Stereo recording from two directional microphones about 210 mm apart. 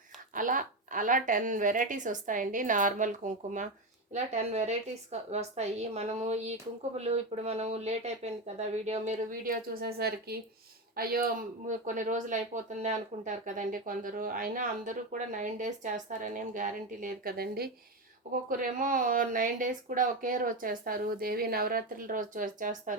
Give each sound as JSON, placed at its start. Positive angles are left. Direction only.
{"t": 0.3, "sound": "speech", "side_deg": -40}